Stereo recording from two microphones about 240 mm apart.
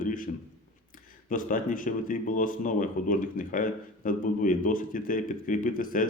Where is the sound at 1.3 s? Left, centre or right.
Left.